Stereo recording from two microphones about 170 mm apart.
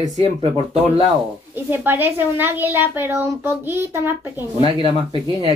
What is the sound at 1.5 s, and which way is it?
A woman's voice, 10° right (ahead or behind).